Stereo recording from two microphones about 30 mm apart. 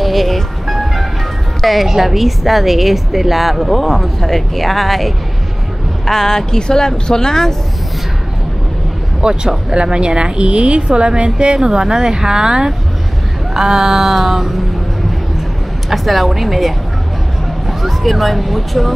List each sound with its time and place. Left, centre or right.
0.0 s music: centre
1.6 s a woman's voice: centre
6.0 s speech: centre
9.2 s speech: right
9.8 s a woman's voice: right
13.5 s a sound: centre
15.9 s a woman's voice: centre